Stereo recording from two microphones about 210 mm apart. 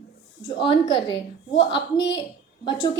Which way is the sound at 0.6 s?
20° left (ahead or behind).